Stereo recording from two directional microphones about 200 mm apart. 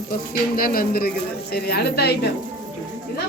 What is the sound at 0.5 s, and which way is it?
A woman's voice, 45° left (ahead or behind).